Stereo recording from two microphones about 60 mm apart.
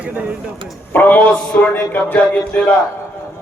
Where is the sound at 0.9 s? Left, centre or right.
Left.